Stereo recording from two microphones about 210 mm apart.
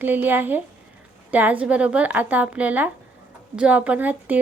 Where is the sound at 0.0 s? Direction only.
10° right (ahead or behind).